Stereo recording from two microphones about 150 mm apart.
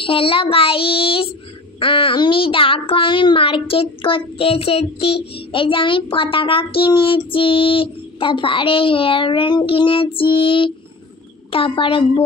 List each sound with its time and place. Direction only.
0.0 s a child's voice: 35° left (ahead or behind)